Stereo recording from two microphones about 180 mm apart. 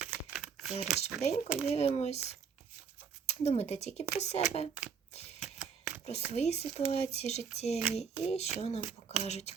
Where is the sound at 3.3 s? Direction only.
35° left (ahead or behind).